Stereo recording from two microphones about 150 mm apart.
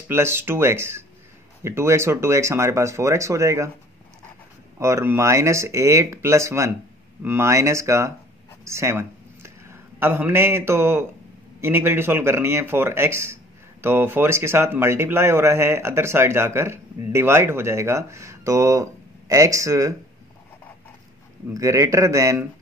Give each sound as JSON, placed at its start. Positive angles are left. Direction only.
{"t": 0.1, "sound": "speech", "side_deg": -15}
{"t": 4.7, "sound": "a man's voice", "side_deg": -20}
{"t": 21.5, "sound": "speech", "side_deg": -20}